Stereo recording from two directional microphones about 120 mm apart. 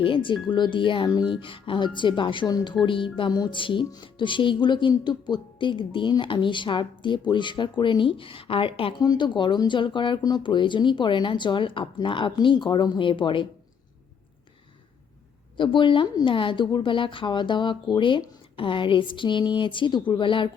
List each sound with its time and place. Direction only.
0.0 s music: 45° left (ahead or behind)
0.4 s speech: 40° left (ahead or behind)
1.3 s music: 45° left (ahead or behind)
9.0 s speech: 35° left (ahead or behind)
15.5 s music: 40° left (ahead or behind)